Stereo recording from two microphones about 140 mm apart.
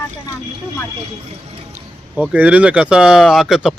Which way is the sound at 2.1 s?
10° right (ahead or behind).